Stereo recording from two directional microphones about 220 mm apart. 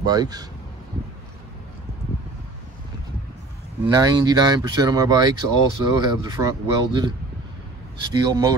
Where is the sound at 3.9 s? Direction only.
15° right (ahead or behind).